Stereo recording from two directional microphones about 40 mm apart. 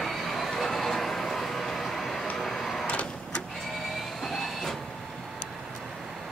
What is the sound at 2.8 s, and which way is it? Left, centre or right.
Printer, left.